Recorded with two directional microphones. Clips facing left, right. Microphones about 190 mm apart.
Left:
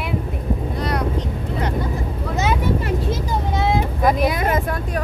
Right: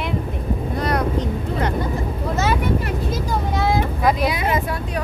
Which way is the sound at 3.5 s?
25° left (ahead or behind).